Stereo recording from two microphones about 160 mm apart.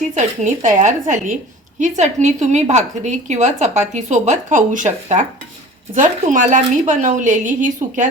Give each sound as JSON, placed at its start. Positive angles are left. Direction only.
{"t": 0.1, "sound": "a woman's voice", "side_deg": -50}